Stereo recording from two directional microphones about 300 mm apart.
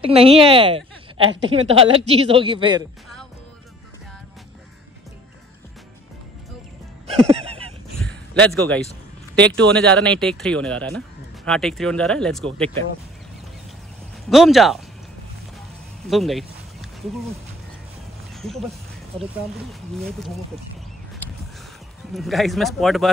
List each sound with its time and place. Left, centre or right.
0.0 s a woman's voice: centre
7.1 s music: centre
8.0 s a sound: centre
9.3 s speech: centre
14.3 s speech: centre
16.1 s speech: centre
18.3 s speech: centre
22.1 s speech: centre